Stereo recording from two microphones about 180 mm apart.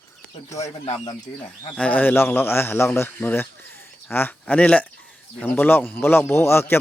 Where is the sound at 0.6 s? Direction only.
35° left (ahead or behind).